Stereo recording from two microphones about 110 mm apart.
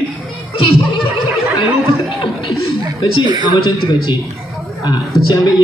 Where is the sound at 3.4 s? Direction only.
45° left (ahead or behind).